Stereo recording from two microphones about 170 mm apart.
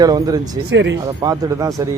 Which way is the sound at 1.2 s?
20° right (ahead or behind).